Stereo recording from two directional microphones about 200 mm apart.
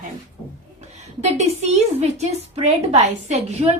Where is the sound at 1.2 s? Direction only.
35° right (ahead or behind).